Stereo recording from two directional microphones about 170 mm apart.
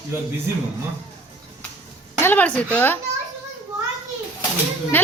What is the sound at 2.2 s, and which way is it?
Speech, 10° left (ahead or behind).